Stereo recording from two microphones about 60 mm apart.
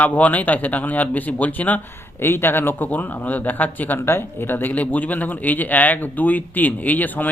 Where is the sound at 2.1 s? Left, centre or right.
Left.